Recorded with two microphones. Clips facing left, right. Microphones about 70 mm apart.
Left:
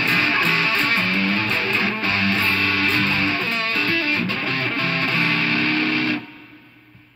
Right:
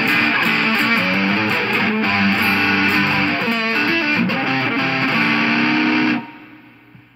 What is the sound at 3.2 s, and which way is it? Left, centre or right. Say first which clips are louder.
Music: right 4 dB; right.